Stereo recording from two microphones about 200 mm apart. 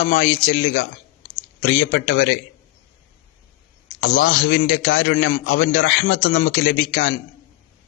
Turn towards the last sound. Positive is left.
turn(degrees=55)  # may be behind; listen again after turning